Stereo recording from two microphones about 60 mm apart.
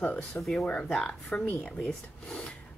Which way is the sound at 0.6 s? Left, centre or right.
Centre.